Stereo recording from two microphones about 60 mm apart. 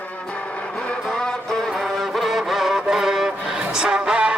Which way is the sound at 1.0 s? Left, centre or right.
Centre.